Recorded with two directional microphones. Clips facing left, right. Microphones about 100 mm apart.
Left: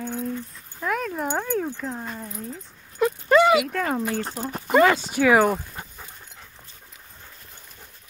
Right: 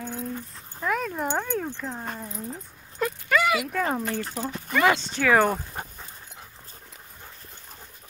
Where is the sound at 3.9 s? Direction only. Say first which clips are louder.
Left 2 dB; 5° left (ahead or behind).